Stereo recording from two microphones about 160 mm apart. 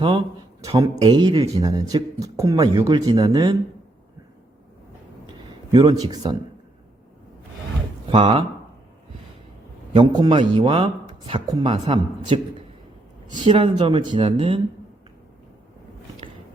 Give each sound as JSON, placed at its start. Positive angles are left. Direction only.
{"t": 0.6, "sound": "speech", "side_deg": -20}
{"t": 1.0, "sound": "speech", "side_deg": -30}
{"t": 5.7, "sound": "speech", "side_deg": -25}
{"t": 8.0, "sound": "speech", "side_deg": -35}
{"t": 9.9, "sound": "speech", "side_deg": -25}
{"t": 13.4, "sound": "speech", "side_deg": -30}